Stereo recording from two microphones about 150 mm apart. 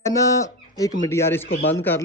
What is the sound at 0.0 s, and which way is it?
Speech, 20° left (ahead or behind).